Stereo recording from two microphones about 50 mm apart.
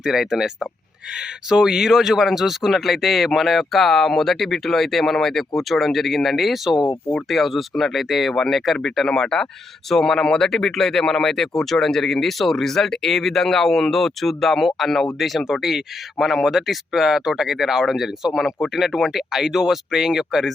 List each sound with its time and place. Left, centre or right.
0.0 s speech: centre
9.0 s speech: centre